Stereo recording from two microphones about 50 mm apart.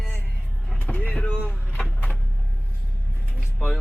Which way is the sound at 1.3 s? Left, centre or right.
Left.